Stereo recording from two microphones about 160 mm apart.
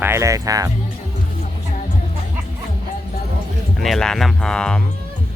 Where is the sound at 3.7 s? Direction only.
Centre (ahead or behind).